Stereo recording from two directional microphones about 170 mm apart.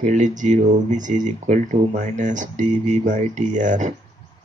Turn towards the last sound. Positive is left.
turn(degrees=-45)  # may be behind; listen again after turning